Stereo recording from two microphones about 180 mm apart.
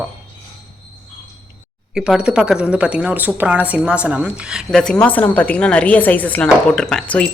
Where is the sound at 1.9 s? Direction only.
5° right (ahead or behind).